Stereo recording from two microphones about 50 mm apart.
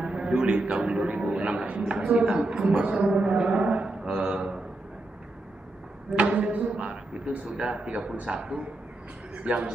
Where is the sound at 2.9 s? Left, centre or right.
Right.